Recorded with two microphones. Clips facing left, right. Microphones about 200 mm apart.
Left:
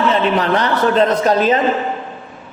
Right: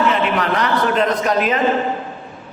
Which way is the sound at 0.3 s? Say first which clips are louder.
Left 2 dB; 30° left (ahead or behind).